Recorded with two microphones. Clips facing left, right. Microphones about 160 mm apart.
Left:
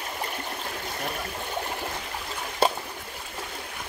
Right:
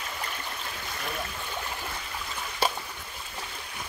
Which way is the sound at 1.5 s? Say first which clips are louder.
Left 5 dB; 50° left (ahead or behind).